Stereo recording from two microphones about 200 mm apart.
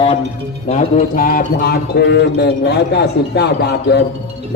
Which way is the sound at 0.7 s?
35° left (ahead or behind).